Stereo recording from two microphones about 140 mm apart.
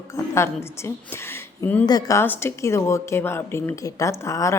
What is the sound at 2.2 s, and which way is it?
A woman's voice, 15° left (ahead or behind).